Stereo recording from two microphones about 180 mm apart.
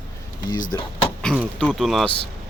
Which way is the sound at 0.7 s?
15° left (ahead or behind).